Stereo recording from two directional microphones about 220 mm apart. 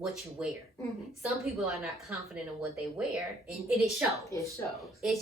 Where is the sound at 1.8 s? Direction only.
Centre (ahead or behind).